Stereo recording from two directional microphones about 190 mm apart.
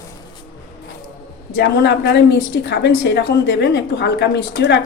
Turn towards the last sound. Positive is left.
turn(degrees=60)  # may be behind; listen again after turning